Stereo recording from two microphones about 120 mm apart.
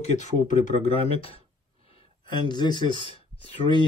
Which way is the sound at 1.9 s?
45° left (ahead or behind).